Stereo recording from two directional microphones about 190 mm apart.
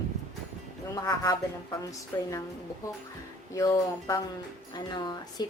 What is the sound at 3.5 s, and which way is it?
A woman's voice, 15° left (ahead or behind).